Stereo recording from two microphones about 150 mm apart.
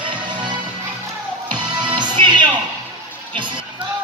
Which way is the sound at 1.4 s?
30° right (ahead or behind).